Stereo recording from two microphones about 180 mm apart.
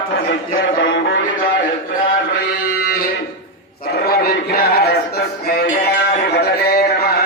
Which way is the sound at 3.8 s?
60° left (ahead or behind).